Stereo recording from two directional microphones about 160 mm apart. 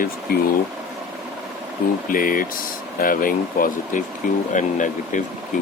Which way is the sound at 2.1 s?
60° left (ahead or behind).